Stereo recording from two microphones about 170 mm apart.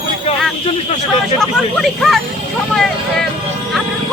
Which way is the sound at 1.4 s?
Centre (ahead or behind).